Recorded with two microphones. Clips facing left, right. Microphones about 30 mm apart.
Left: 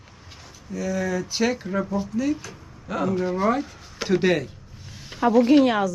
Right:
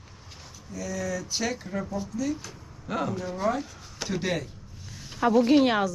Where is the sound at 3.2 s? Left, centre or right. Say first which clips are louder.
Left 5 dB; left.